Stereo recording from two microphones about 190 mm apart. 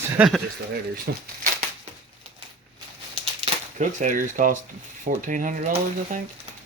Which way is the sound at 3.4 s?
40° right (ahead or behind).